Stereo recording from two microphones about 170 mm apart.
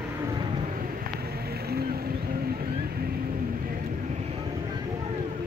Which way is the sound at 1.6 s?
65° right (ahead or behind).